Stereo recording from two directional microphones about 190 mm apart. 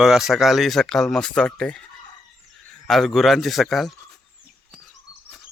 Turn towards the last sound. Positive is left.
turn(degrees=0)  # may be behind; listen again after turning